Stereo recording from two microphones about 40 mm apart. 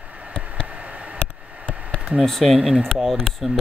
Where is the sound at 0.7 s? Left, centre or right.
Right.